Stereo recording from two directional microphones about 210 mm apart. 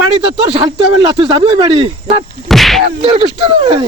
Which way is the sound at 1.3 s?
20° right (ahead or behind).